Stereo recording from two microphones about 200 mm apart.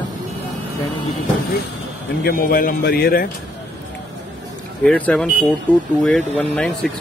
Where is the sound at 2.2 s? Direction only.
50° left (ahead or behind).